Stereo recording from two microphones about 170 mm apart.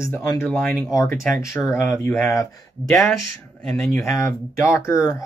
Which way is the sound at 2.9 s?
Centre (ahead or behind).